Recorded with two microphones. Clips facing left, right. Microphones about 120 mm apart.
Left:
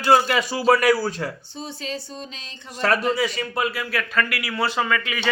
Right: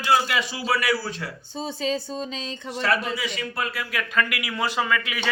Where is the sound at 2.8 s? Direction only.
45° left (ahead or behind).